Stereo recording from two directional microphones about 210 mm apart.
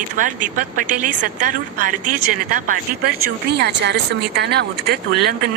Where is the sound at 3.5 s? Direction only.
55° right (ahead or behind).